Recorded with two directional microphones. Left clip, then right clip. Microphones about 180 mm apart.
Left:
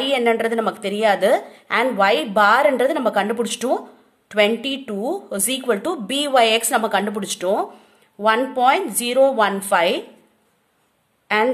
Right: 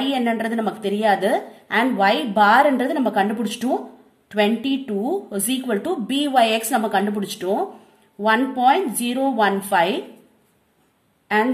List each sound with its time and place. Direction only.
0.0 s a woman's voice: 45° left (ahead or behind)